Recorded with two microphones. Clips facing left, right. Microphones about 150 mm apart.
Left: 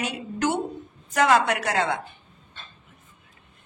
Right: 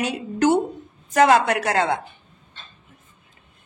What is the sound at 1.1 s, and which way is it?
Speech, 45° right (ahead or behind).